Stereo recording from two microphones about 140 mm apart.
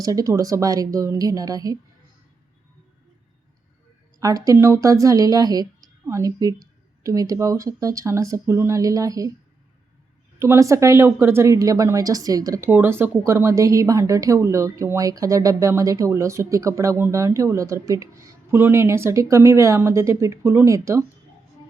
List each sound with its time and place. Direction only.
0.0 s a woman's voice: 25° right (ahead or behind)
4.2 s a woman's voice: 25° right (ahead or behind)
10.4 s a woman's voice: 20° right (ahead or behind)